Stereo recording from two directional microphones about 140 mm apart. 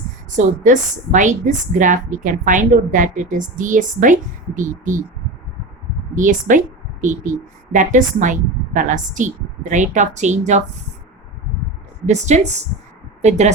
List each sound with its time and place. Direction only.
0.3 s a woman's voice: 60° right (ahead or behind)
6.1 s a woman's voice: 65° right (ahead or behind)
12.0 s a woman's voice: 55° right (ahead or behind)